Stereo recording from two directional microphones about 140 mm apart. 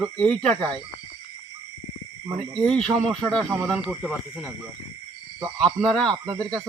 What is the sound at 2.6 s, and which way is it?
Speech, 5° left (ahead or behind).